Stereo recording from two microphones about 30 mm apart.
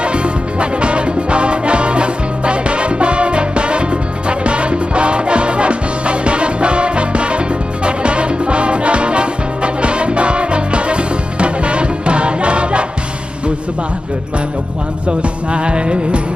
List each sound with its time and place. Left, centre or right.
0.0 s music: right
15.5 s music: right